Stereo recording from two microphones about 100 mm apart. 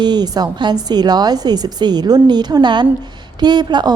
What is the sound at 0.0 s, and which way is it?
A woman's voice, 45° right (ahead or behind).